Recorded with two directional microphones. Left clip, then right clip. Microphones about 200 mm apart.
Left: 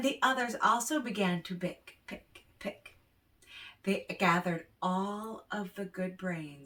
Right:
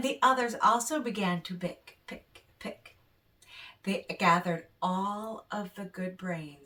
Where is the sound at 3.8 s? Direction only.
10° right (ahead or behind).